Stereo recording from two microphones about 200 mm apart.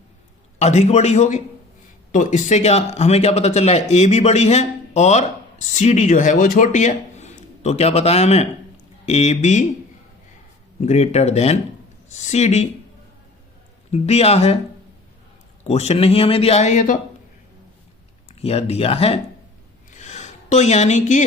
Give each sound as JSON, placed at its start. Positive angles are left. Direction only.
{"t": 0.6, "sound": "speech", "side_deg": 35}
{"t": 10.8, "sound": "speech", "side_deg": 35}
{"t": 13.9, "sound": "speech", "side_deg": 30}
{"t": 15.6, "sound": "speech", "side_deg": 30}
{"t": 18.3, "sound": "speech", "side_deg": 30}
{"t": 19.9, "sound": "a sound", "side_deg": 35}